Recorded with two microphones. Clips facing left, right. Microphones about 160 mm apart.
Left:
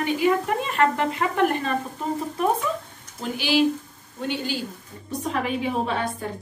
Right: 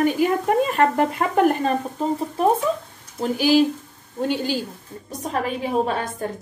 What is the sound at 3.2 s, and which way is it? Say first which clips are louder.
A woman's voice: right 4 dB; 45° right (ahead or behind).